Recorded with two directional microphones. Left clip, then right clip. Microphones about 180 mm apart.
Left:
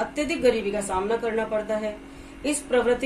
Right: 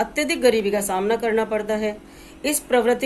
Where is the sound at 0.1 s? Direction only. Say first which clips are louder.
Right 2 dB; 30° right (ahead or behind).